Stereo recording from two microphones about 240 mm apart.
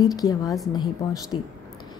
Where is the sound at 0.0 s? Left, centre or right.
Centre.